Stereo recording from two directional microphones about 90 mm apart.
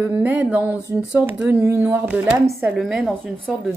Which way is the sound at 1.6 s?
25° right (ahead or behind).